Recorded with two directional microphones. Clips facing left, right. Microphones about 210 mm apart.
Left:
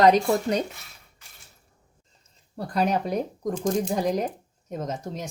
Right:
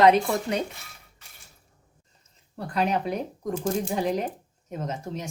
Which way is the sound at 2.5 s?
40° left (ahead or behind).